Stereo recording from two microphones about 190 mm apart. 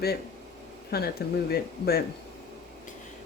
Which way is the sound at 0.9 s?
55° left (ahead or behind).